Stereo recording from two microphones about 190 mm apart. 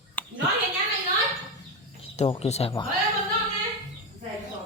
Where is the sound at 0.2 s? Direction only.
10° left (ahead or behind).